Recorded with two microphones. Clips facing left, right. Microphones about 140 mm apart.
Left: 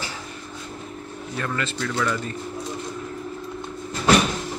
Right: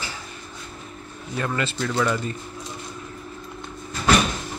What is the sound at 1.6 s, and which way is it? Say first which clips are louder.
Speech: right 2 dB; 5° right (ahead or behind).